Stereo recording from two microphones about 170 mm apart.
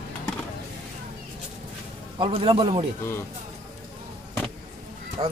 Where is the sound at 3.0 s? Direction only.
15° left (ahead or behind).